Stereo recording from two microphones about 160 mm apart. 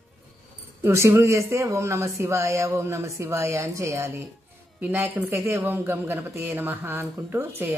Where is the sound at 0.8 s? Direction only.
15° right (ahead or behind).